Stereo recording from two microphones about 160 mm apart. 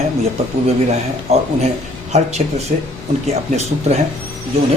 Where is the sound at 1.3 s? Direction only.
40° right (ahead or behind).